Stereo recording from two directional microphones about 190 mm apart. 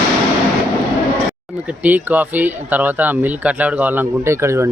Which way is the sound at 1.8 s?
10° right (ahead or behind).